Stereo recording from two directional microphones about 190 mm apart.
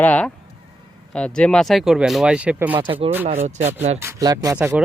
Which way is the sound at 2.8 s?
30° right (ahead or behind).